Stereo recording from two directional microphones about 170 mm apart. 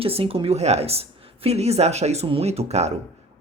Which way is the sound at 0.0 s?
35° right (ahead or behind).